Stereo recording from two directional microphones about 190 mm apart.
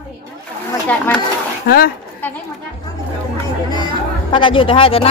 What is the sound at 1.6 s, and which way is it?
Speech, 50° left (ahead or behind).